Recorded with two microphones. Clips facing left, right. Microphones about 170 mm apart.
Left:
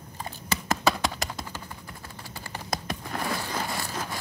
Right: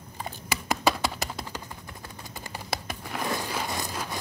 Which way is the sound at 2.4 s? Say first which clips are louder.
Left 2 dB; 10° right (ahead or behind).